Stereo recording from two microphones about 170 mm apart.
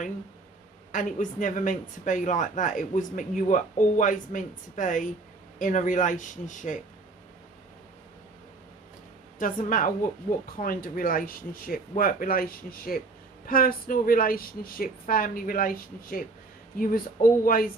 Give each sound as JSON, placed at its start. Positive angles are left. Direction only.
{"t": 0.9, "sound": "speech", "side_deg": 50}
{"t": 9.4, "sound": "speech", "side_deg": 50}